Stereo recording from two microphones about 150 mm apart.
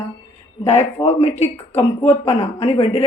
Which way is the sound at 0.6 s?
45° left (ahead or behind).